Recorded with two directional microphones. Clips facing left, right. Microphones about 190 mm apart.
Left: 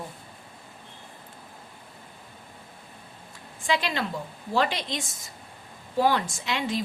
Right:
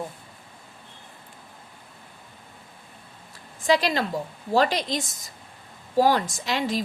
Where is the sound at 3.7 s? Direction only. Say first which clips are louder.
Right 5 dB; 40° right (ahead or behind).